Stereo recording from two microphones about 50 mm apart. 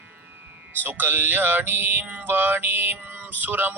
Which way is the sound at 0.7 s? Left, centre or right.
Right.